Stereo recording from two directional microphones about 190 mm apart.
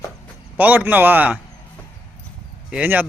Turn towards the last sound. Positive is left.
turn(degrees=-10)  # may be behind; listen again after turning